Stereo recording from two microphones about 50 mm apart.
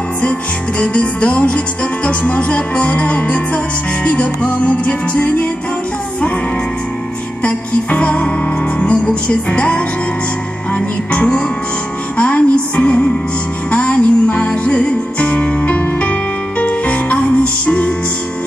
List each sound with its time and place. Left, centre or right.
0.2 s music: left
5.2 s music: left
7.4 s music: left